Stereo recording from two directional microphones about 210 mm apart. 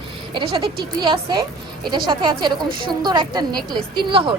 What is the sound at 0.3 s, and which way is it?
A woman's voice, 25° right (ahead or behind).